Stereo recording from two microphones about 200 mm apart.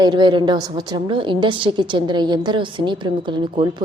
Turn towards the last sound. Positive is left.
turn(degrees=-25)  # may be behind; listen again after turning